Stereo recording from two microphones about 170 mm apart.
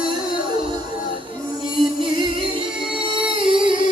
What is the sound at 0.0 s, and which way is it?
Music, 60° left (ahead or behind).